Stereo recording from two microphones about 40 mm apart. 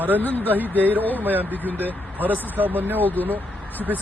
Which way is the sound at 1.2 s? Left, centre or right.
Right.